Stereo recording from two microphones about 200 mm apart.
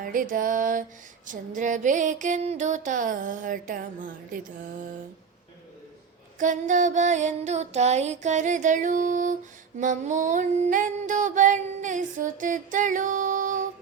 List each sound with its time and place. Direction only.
0.0 s music: 45° right (ahead or behind)
6.4 s music: 40° right (ahead or behind)